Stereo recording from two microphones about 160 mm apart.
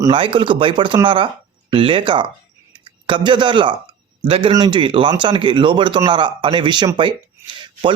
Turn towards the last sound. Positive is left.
turn(degrees=-30)  # may be behind; listen again after turning